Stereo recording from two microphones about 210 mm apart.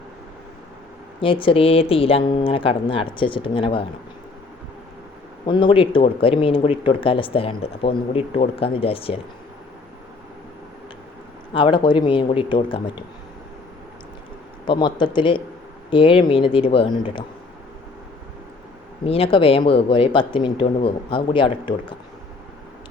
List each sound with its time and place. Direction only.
1.2 s speech: 25° left (ahead or behind)
5.5 s speech: 20° left (ahead or behind)
11.5 s speech: 20° left (ahead or behind)
14.6 s speech: 20° left (ahead or behind)
19.0 s speech: 25° left (ahead or behind)